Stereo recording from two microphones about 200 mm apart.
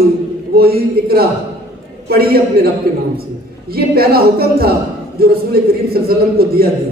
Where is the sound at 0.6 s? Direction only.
50° right (ahead or behind).